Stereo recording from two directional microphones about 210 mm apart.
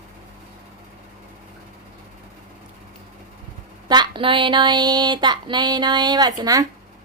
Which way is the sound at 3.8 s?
20° right (ahead or behind).